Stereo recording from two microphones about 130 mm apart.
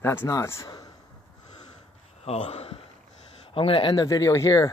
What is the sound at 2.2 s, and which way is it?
Speech, 55° left (ahead or behind).